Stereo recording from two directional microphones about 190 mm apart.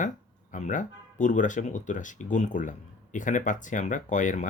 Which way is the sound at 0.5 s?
40° left (ahead or behind).